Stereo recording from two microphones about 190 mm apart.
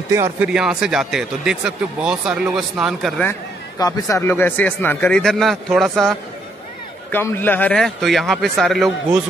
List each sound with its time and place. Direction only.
0.1 s speech: 15° right (ahead or behind)
0.5 s speech: 5° right (ahead or behind)
3.3 s speech: 20° left (ahead or behind); by 9.2 s centre (ahead or behind)